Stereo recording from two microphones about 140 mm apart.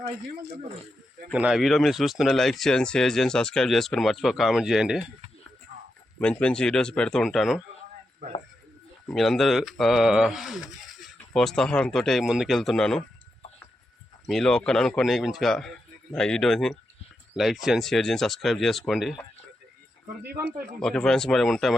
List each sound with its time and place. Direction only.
1.3 s speech: 5° right (ahead or behind)
5.7 s a sound: 60° right (ahead or behind)
6.1 s speech: 10° left (ahead or behind)
9.0 s speech: 5° left (ahead or behind)
14.3 s speech: 5° left (ahead or behind)
20.8 s speech: 5° left (ahead or behind)